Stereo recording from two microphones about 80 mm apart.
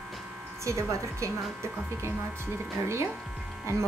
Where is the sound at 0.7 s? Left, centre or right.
Right.